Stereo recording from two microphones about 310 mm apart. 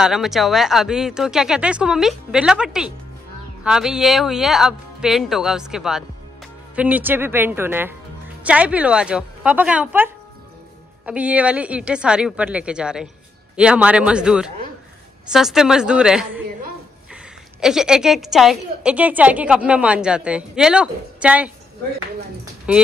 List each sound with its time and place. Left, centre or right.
0.0 s a woman's voice: centre
22.7 s a woman's voice: centre